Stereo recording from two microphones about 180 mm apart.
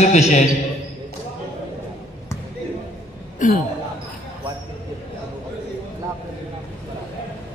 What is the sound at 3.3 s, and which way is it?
Speech, 45° left (ahead or behind).